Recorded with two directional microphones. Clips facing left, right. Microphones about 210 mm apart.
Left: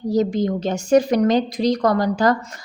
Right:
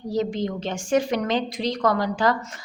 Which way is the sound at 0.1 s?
40° left (ahead or behind).